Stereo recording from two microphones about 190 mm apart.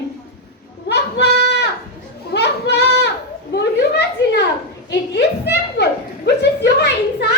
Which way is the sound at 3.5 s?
65° left (ahead or behind).